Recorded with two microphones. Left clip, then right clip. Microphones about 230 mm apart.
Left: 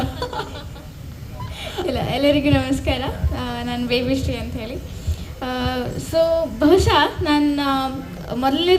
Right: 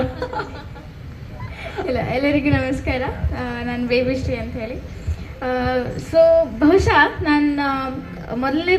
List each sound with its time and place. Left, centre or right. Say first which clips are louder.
0.0 s chuckle: right 2 dB; left
1.7 s chuckle: right 1 dB; left
3.4 s a sound: right 1 dB; left
5.4 s a woman's voice: right 3 dB; left